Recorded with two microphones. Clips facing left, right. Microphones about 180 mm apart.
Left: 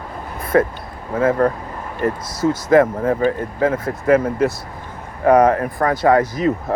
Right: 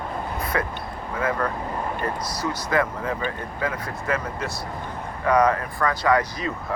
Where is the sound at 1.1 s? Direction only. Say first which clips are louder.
Left 9 dB; 45° left (ahead or behind).